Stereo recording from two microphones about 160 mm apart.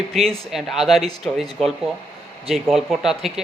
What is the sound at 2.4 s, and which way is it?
Speech, centre (ahead or behind).